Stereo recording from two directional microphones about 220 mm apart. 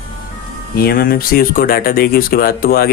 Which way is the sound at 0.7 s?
45° left (ahead or behind).